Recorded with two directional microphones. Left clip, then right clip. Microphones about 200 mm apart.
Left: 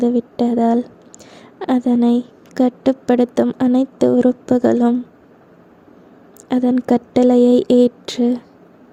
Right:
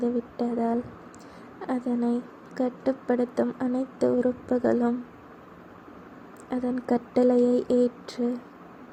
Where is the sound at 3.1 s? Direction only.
55° left (ahead or behind).